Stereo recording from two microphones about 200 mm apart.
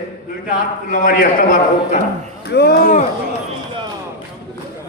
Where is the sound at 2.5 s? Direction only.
55° left (ahead or behind).